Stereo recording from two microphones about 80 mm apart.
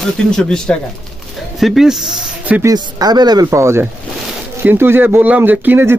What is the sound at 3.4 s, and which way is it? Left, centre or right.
Speech, right.